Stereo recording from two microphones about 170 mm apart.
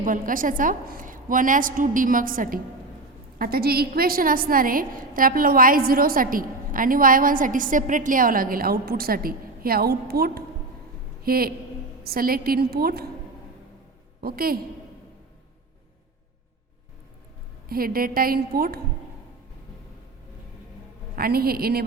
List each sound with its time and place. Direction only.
0.0 s a woman's voice: 50° right (ahead or behind)
14.2 s a woman's voice: 60° right (ahead or behind)
17.7 s a woman's voice: 60° right (ahead or behind)
21.2 s a woman's voice: 65° right (ahead or behind)